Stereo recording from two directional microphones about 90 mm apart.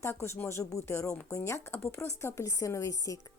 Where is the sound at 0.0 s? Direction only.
30° left (ahead or behind).